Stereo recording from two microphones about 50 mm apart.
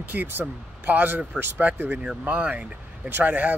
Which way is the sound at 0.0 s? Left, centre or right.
Right.